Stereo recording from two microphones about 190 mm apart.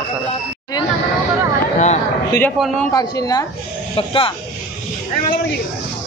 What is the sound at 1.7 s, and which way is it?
Speech, 35° left (ahead or behind).